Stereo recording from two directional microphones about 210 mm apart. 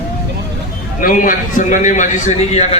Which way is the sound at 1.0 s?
40° left (ahead or behind).